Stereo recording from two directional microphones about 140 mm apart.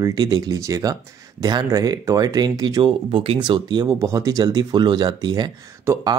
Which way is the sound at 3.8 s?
20° right (ahead or behind).